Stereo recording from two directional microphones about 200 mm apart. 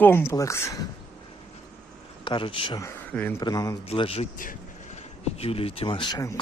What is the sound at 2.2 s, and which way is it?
Speech, 25° left (ahead or behind).